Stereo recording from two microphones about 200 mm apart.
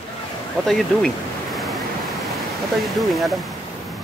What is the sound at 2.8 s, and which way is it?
Speech, centre (ahead or behind).